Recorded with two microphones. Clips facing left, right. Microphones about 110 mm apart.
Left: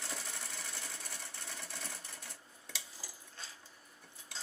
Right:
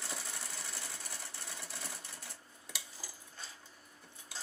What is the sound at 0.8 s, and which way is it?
Sewing machine, 15° right (ahead or behind).